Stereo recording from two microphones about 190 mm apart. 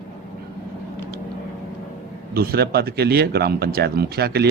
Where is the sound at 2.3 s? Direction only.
55° right (ahead or behind).